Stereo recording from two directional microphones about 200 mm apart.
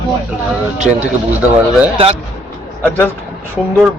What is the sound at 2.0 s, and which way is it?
Speech, 25° right (ahead or behind).